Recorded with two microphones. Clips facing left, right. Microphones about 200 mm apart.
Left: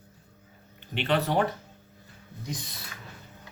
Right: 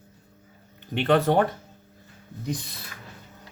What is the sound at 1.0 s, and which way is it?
Speech, 50° right (ahead or behind).